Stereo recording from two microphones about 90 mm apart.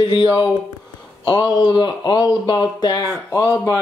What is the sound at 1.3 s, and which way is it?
Speech, 55° left (ahead or behind).